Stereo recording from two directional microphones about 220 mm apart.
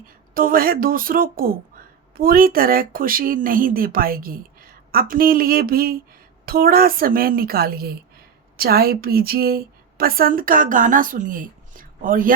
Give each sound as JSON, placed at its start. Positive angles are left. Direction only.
{"t": 0.3, "sound": "speech", "side_deg": -40}